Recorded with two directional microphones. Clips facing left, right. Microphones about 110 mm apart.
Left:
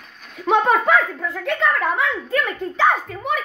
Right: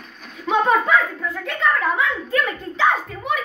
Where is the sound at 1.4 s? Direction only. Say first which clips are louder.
Left 1 dB; 65° left (ahead or behind); by 3.3 s 50° left (ahead or behind).